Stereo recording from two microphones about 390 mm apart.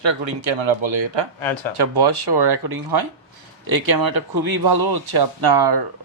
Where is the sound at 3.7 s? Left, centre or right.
Right.